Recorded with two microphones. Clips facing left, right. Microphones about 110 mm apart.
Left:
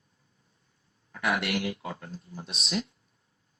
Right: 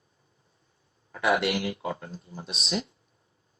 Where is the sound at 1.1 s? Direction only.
30° right (ahead or behind).